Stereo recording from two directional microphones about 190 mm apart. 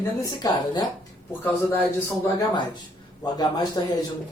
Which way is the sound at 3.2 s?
20° left (ahead or behind).